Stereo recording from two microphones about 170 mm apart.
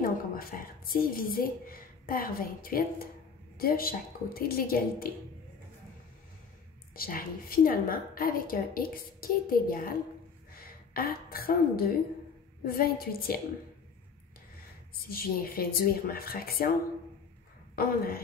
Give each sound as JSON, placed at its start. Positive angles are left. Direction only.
{"t": 0.0, "sound": "a woman's voice", "side_deg": 60}
{"t": 7.0, "sound": "a woman's voice", "side_deg": 60}
{"t": 10.5, "sound": "a sound", "side_deg": 60}
{"t": 12.6, "sound": "a woman's voice", "side_deg": 60}
{"t": 15.0, "sound": "a woman's voice", "side_deg": 60}
{"t": 17.7, "sound": "a woman's voice", "side_deg": 60}